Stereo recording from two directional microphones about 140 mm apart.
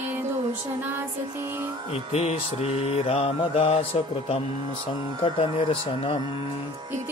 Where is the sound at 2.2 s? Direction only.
45° left (ahead or behind).